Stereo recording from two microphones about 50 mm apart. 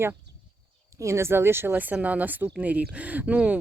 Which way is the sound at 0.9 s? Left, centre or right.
Right.